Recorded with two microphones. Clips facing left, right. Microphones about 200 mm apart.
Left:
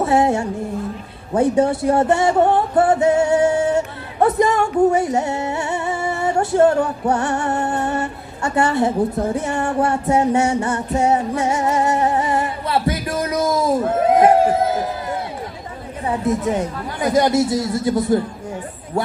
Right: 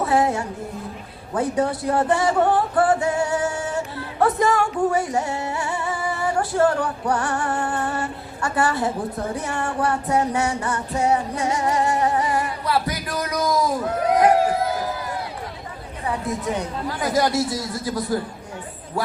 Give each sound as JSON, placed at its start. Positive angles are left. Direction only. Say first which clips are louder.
{"t": 0.0, "sound": "music", "louder": "left 4 dB", "side_deg": 25}
{"t": 1.3, "sound": "speech", "louder": "left 6 dB", "side_deg": 25}
{"t": 4.2, "sound": "music", "louder": "left 3 dB", "side_deg": 20}
{"t": 16.6, "sound": "speech", "louder": "left 3 dB", "side_deg": 20}